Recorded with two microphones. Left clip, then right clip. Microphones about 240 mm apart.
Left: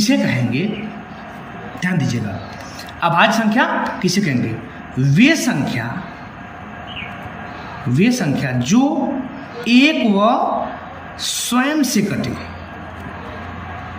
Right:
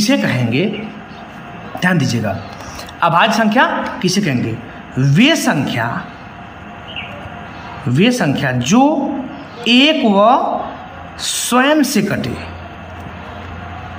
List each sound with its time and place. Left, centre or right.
0.0 s a man's voice: centre
1.8 s a man's voice: centre
7.9 s a man's voice: centre